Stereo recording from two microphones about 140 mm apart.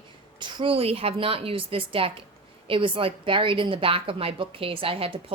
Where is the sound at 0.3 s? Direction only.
35° right (ahead or behind).